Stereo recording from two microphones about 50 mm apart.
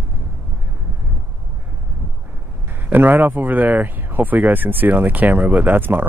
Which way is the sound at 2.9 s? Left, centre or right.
Right.